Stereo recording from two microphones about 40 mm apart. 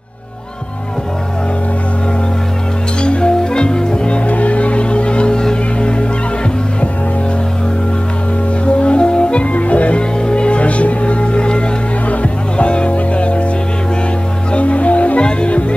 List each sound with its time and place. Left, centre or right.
3.0 s music: left
4.3 s music: left
8.6 s music: left
14.5 s music: left